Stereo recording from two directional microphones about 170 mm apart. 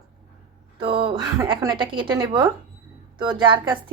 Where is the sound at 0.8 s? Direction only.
30° right (ahead or behind).